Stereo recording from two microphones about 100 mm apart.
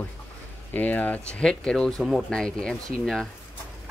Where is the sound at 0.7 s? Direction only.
15° left (ahead or behind).